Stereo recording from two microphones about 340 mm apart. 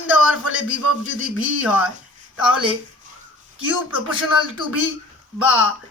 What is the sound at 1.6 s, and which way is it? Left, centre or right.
Speech, centre.